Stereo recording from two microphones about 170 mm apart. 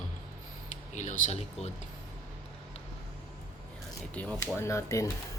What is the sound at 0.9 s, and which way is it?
Speech, 45° left (ahead or behind).